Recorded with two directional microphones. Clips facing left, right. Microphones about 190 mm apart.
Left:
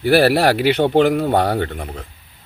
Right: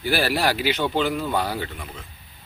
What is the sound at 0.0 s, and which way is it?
Speech, 65° left (ahead or behind).